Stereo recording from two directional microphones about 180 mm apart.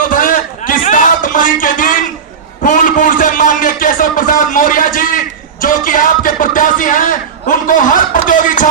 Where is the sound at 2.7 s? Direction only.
45° left (ahead or behind).